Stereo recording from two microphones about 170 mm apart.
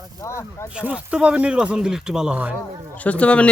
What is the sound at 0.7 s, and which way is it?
Speech, 5° right (ahead or behind).